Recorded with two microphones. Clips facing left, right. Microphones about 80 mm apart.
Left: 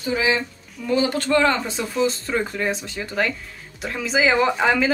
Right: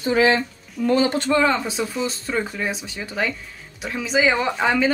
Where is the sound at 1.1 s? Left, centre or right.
Right.